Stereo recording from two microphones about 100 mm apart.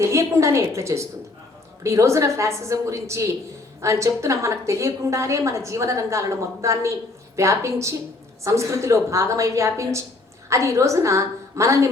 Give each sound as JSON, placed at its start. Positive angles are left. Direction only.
{"t": 0.0, "sound": "a woman's voice", "side_deg": -30}